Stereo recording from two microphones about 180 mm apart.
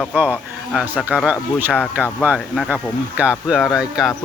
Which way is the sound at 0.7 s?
5° right (ahead or behind).